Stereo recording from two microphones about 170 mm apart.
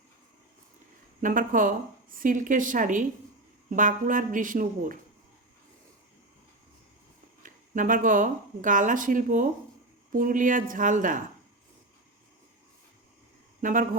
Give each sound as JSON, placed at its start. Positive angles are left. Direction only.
{"t": 1.2, "sound": "a woman's voice", "side_deg": -50}
{"t": 7.4, "sound": "a woman's voice", "side_deg": -50}
{"t": 13.6, "sound": "speech", "side_deg": -50}